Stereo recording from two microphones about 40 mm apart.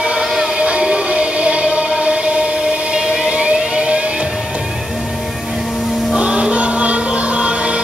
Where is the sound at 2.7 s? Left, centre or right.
Right.